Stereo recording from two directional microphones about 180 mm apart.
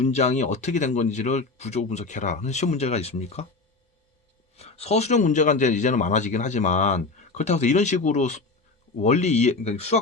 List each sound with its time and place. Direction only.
0.0 s a man's voice: 40° left (ahead or behind)
4.5 s a man's voice: 35° left (ahead or behind)